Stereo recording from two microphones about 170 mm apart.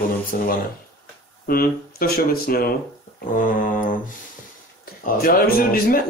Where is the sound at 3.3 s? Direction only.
50° left (ahead or behind).